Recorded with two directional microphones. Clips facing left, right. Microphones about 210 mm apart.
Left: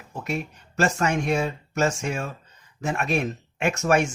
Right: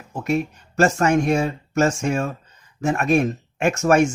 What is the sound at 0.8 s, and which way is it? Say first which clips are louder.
Speech: right 6 dB; 45° right (ahead or behind).